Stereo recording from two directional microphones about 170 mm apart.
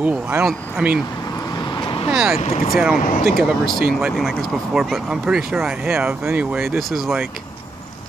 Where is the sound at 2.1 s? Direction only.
Centre (ahead or behind).